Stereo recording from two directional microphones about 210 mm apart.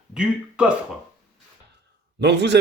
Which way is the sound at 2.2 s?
55° right (ahead or behind).